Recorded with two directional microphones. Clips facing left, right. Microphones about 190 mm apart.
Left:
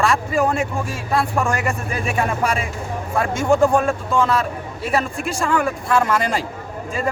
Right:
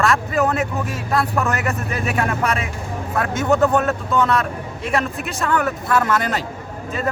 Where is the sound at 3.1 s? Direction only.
10° left (ahead or behind).